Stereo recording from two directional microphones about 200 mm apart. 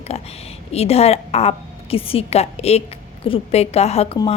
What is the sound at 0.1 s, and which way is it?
A woman's voice, 30° left (ahead or behind).